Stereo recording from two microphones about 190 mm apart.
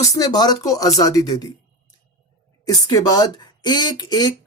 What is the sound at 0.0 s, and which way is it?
Speech, 20° left (ahead or behind).